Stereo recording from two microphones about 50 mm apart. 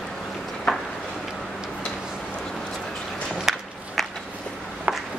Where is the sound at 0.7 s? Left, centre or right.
Centre.